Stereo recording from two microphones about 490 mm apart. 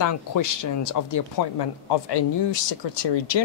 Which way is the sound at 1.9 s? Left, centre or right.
Left.